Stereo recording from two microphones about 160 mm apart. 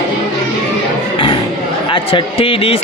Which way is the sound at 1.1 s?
30° left (ahead or behind).